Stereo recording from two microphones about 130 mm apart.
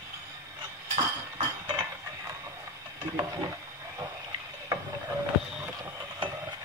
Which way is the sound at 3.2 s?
25° right (ahead or behind).